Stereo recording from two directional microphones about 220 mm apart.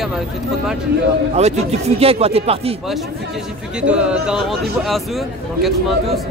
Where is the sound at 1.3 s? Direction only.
30° right (ahead or behind).